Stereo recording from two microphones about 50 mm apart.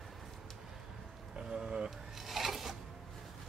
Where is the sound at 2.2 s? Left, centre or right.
Centre.